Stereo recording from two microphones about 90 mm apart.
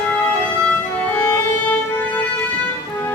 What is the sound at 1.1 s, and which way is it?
Music, 15° left (ahead or behind).